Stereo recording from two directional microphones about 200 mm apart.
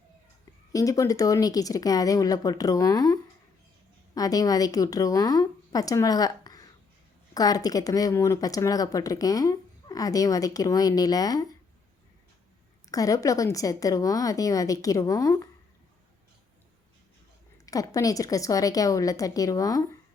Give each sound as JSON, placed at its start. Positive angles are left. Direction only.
{"t": 0.7, "sound": "a woman's voice", "side_deg": 15}
{"t": 12.9, "sound": "a woman's voice", "side_deg": 15}
{"t": 17.7, "sound": "a woman's voice", "side_deg": 15}